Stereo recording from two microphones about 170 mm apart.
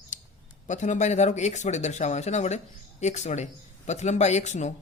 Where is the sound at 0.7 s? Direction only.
45° left (ahead or behind).